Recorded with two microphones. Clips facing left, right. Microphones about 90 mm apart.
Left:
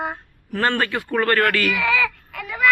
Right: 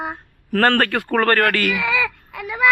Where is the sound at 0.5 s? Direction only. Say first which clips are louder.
Right 4 dB; 55° right (ahead or behind); by 1.6 s 40° right (ahead or behind).